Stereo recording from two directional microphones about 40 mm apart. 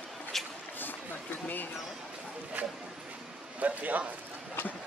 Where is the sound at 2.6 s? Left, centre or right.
Right.